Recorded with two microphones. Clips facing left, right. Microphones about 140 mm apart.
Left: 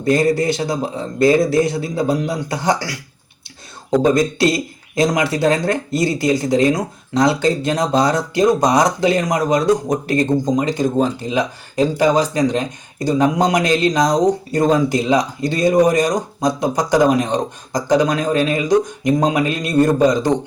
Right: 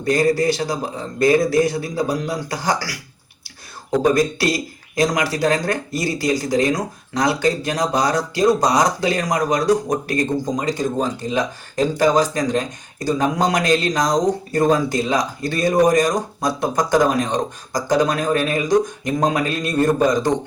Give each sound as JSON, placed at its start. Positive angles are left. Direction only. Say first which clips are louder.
{"t": 0.0, "sound": "speech", "louder": "left 2 dB", "side_deg": 25}
{"t": 4.0, "sound": "speech", "louder": "left 2 dB", "side_deg": 25}